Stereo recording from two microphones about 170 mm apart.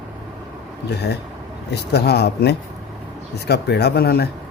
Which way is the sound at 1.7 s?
75° left (ahead or behind).